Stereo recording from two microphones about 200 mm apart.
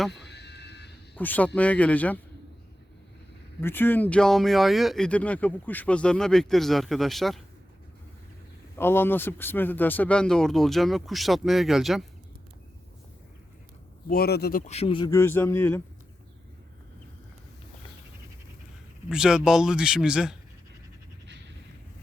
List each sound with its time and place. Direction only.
0.1 s a sound: 60° left (ahead or behind)
1.1 s a man's voice: 10° left (ahead or behind)
3.6 s speech: 10° left (ahead or behind)
8.8 s speech: 10° left (ahead or behind)
14.1 s a man's voice: 50° left (ahead or behind)
14.7 s speech: 30° left (ahead or behind)
15.1 s speech: 10° left (ahead or behind)
19.0 s speech: 5° right (ahead or behind)